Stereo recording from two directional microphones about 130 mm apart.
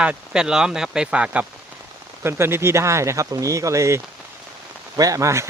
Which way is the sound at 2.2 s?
20° right (ahead or behind).